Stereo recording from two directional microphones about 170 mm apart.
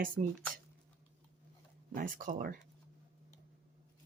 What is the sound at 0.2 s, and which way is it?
Speech, 50° right (ahead or behind).